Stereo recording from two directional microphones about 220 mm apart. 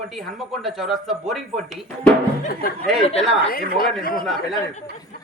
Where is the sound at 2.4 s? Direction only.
40° left (ahead or behind).